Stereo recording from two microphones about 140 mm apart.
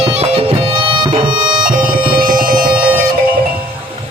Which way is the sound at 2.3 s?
90° right.